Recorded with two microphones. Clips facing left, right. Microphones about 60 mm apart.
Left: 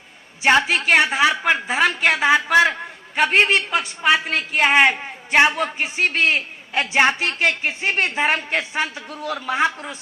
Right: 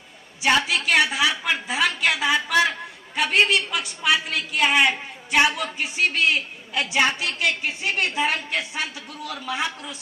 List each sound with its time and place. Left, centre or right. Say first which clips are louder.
0.4 s a man's voice: left 4 dB; left